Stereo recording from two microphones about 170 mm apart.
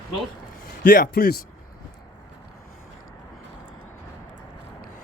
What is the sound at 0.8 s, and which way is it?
Speech, 55° left (ahead or behind).